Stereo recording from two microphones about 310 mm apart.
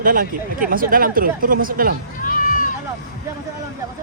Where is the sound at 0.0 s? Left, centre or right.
Right.